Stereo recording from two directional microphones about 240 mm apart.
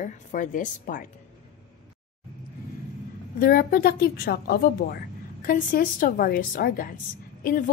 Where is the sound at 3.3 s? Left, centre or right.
Left.